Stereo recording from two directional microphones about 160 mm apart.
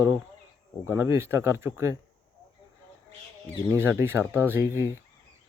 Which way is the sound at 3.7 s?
15° right (ahead or behind).